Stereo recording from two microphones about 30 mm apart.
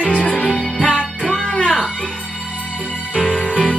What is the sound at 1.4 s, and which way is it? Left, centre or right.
Music, left.